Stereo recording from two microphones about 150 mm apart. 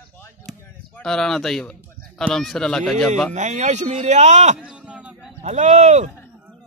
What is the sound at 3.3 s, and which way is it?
Speech, 50° right (ahead or behind).